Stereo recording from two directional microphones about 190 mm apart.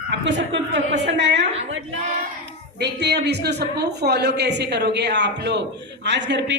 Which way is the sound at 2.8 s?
60° right (ahead or behind).